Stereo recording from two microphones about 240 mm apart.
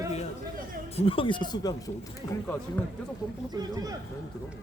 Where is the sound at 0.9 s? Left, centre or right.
Left.